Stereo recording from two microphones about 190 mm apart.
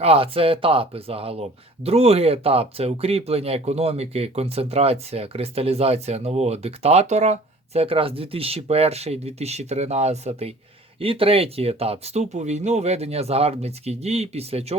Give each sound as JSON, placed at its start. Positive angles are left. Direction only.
{"t": 0.0, "sound": "speech", "side_deg": -30}